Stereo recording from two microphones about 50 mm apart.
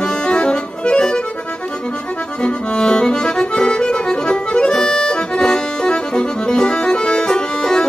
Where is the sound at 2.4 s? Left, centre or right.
Centre.